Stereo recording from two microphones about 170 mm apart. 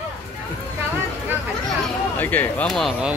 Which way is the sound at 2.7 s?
Centre (ahead or behind).